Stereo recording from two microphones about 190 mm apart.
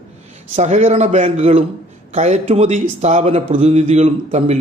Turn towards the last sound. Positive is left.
turn(degrees=-35)  # may be behind; listen again after turning